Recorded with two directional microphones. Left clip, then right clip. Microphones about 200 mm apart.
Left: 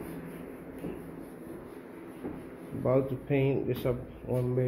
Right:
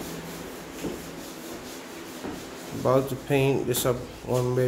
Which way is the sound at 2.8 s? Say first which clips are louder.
Right 5 dB; 15° right (ahead or behind).